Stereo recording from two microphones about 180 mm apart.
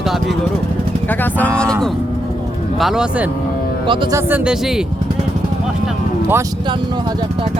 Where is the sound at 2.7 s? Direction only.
Centre (ahead or behind).